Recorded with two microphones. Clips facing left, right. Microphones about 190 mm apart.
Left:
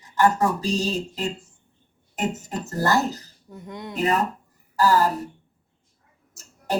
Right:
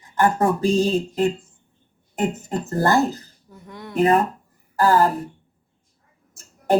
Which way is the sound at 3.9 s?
55° right (ahead or behind).